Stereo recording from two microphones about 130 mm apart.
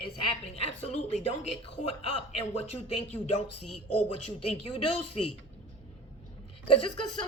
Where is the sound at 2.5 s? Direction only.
55° left (ahead or behind).